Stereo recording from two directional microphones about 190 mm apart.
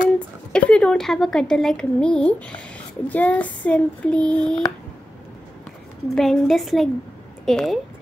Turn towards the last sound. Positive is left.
turn(degrees=0)  # may be behind; listen again after turning